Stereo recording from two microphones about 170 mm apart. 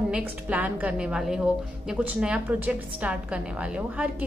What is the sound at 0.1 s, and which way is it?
A woman's voice, 10° right (ahead or behind).